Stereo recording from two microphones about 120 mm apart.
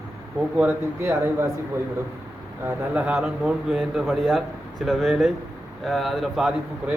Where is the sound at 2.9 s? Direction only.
10° right (ahead or behind).